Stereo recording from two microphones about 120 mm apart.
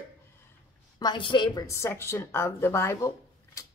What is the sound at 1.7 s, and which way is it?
Speech, 20° left (ahead or behind).